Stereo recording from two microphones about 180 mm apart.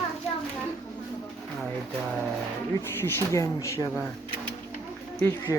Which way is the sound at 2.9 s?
15° left (ahead or behind).